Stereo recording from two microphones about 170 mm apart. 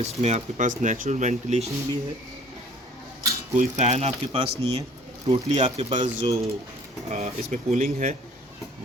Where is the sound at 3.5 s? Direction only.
45° right (ahead or behind).